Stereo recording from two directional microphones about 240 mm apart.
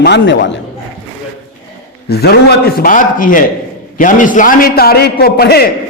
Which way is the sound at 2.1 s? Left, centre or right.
Left.